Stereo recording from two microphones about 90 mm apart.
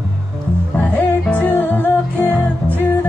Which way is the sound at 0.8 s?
20° left (ahead or behind).